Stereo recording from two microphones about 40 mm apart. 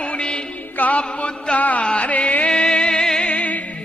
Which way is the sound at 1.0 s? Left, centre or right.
Left.